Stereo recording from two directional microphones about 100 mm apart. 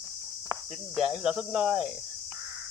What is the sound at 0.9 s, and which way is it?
Cricket, 10° right (ahead or behind).